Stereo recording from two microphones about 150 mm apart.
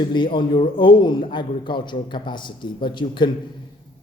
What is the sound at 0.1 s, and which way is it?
A man's voice, 35° left (ahead or behind).